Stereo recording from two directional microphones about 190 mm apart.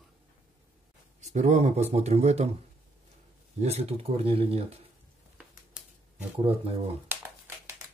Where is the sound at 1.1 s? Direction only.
35° right (ahead or behind).